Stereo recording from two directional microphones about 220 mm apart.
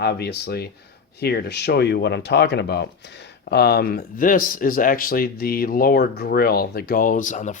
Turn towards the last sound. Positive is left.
turn(degrees=35)  # may be behind; listen again after turning